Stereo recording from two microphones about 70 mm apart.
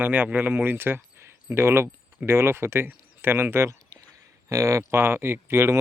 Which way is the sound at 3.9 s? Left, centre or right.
Right.